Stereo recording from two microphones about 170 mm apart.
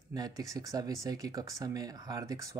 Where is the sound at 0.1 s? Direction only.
20° right (ahead or behind).